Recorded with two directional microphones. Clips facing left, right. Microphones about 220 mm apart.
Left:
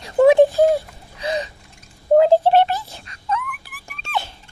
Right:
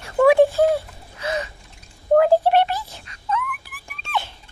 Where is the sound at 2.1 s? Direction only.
25° left (ahead or behind).